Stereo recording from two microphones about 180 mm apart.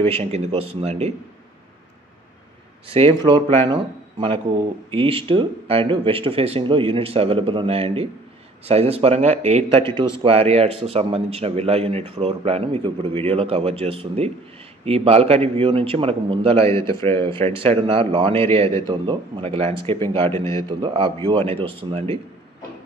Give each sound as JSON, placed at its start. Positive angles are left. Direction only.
{"t": 0.0, "sound": "speech", "side_deg": -35}
{"t": 2.9, "sound": "a man's voice", "side_deg": -30}
{"t": 20.2, "sound": "a man's voice", "side_deg": 15}
{"t": 20.5, "sound": "a man's voice", "side_deg": -25}